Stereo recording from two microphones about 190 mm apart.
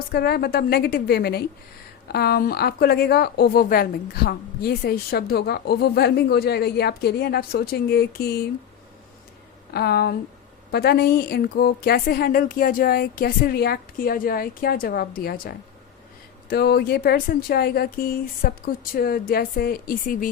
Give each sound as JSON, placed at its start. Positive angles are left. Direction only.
{"t": 0.1, "sound": "a woman's voice", "side_deg": 55}
{"t": 9.7, "sound": "a woman's voice", "side_deg": 55}